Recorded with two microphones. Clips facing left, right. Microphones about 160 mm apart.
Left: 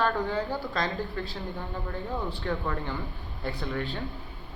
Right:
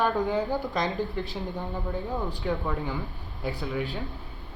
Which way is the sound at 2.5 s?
Centre (ahead or behind).